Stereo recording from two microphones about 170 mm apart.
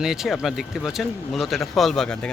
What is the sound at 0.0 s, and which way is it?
Speech, 5° right (ahead or behind).